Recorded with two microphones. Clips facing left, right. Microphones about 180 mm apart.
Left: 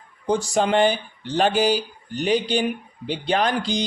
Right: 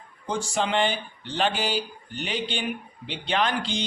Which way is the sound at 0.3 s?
40° left (ahead or behind).